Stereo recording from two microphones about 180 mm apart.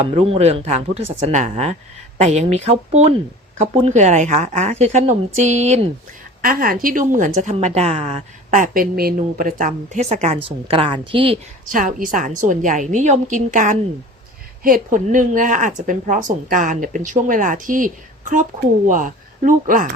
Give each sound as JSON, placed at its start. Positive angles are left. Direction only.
{"t": 0.1, "sound": "a woman's voice", "side_deg": -35}
{"t": 6.4, "sound": "a woman's voice", "side_deg": -55}
{"t": 11.7, "sound": "a woman's voice", "side_deg": -50}